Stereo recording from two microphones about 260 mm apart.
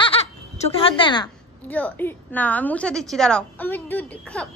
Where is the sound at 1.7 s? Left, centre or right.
Centre.